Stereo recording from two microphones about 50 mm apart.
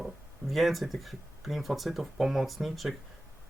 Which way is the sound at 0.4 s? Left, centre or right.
Centre.